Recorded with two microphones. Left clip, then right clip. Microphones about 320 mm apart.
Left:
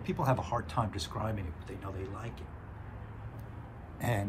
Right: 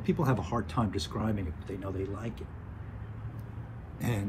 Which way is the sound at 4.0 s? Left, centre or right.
Left.